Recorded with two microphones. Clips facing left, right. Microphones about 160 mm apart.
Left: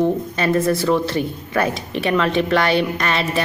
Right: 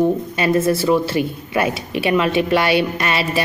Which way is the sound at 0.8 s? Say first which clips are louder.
Right 2 dB; 5° right (ahead or behind).